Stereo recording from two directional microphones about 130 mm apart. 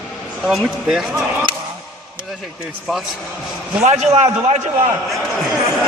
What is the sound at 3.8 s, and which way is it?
Speech, 55° right (ahead or behind).